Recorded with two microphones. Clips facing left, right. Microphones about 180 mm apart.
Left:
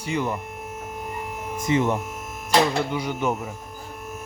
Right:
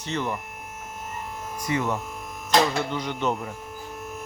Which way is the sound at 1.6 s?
20° left (ahead or behind).